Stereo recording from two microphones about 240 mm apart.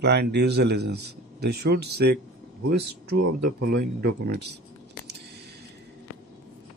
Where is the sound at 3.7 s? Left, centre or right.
Right.